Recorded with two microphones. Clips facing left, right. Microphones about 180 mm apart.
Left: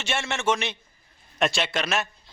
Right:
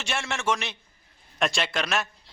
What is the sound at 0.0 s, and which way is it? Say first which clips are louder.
A man's voice: left 2 dB; centre (ahead or behind).